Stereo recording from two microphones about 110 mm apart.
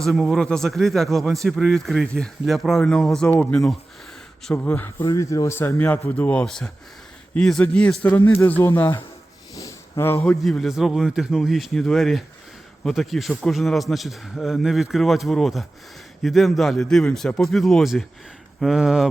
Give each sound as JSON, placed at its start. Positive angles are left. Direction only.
{"t": 0.0, "sound": "a man's voice", "side_deg": 0}
{"t": 5.0, "sound": "a man's voice", "side_deg": 30}
{"t": 8.1, "sound": "speech", "side_deg": 20}
{"t": 9.6, "sound": "a sound", "side_deg": 30}
{"t": 10.2, "sound": "a man's voice", "side_deg": 0}